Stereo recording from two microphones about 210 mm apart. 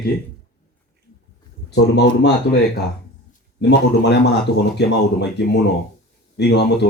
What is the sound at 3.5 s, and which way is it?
Speech, 55° left (ahead or behind).